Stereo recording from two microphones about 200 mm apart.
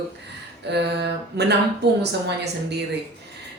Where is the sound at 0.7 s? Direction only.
55° right (ahead or behind).